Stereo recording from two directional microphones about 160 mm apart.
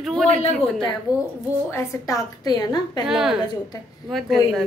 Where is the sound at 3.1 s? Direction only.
5° right (ahead or behind).